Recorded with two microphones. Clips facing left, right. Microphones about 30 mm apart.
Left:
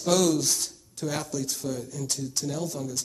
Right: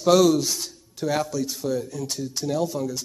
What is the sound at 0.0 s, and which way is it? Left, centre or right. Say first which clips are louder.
Speech: right 6 dB; centre.